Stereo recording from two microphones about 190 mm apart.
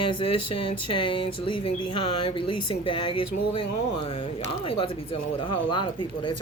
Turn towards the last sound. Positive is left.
turn(degrees=25)  # may be behind; listen again after turning